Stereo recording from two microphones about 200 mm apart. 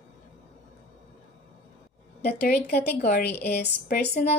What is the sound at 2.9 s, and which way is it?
A woman's voice, 55° left (ahead or behind).